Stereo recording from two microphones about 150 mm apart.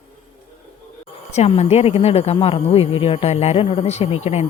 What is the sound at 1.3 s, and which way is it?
A woman's voice, 45° left (ahead or behind).